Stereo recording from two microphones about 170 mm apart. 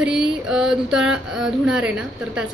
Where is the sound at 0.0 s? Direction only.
5° right (ahead or behind).